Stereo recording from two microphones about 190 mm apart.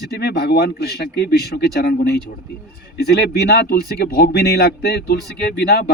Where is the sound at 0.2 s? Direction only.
60° left (ahead or behind).